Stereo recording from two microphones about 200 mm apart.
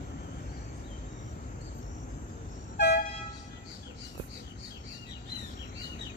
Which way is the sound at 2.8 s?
50° left (ahead or behind).